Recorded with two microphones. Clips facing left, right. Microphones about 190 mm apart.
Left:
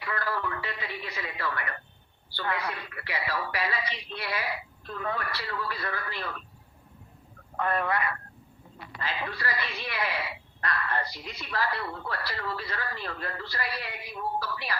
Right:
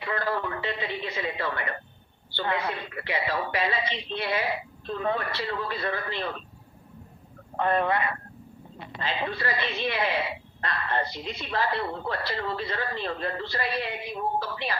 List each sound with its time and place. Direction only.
0.0 s a sound: 25° right (ahead or behind)
2.3 s speech: 25° right (ahead or behind)
7.5 s speech: 25° right (ahead or behind)